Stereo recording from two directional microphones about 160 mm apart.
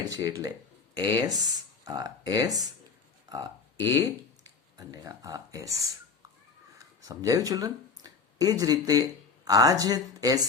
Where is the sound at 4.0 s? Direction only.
25° right (ahead or behind).